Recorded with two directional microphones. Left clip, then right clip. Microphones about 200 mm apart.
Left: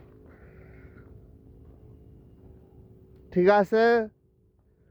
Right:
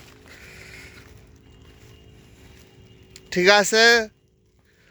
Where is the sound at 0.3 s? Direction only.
5° left (ahead or behind).